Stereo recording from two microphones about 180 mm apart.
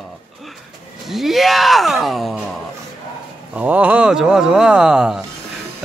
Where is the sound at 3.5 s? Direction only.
10° right (ahead or behind).